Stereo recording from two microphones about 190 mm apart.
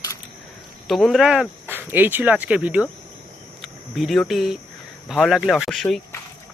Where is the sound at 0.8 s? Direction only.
Centre (ahead or behind).